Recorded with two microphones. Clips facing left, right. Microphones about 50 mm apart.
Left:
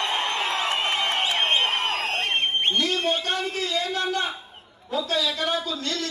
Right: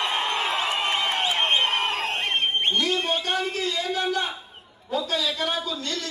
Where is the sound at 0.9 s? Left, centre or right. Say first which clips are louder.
Even; centre.